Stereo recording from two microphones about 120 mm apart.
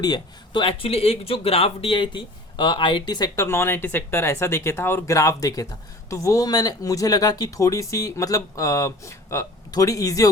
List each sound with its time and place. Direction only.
0.0 s speech: 40° left (ahead or behind)